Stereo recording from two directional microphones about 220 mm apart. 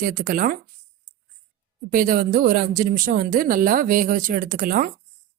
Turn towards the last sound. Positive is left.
turn(degrees=-40)  # may be behind; listen again after turning